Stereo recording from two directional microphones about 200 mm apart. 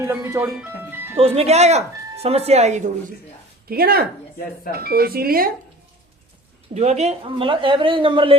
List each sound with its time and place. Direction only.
0.0 s speech: 15° right (ahead or behind)
1.2 s speech: 30° right (ahead or behind)
3.7 s speech: 50° right (ahead or behind)
6.7 s a woman's voice: 35° right (ahead or behind)